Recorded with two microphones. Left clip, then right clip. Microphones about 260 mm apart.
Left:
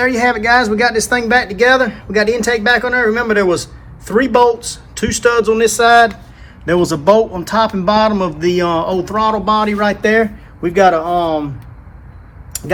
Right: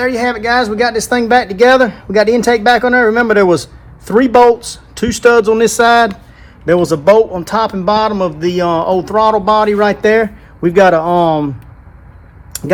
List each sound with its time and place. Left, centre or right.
0.0 s speech: centre; by 6.1 s right
6.7 s speech: centre